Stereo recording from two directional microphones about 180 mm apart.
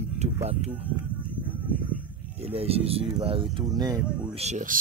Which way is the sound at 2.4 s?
35° right (ahead or behind).